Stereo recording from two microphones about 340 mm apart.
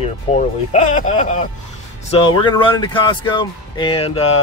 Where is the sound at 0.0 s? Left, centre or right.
Centre.